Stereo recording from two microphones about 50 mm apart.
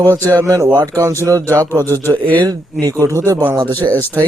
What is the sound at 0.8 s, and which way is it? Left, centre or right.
Speech, right.